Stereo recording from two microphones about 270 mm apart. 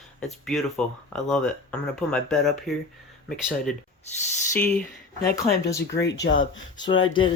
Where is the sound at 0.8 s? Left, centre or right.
Centre.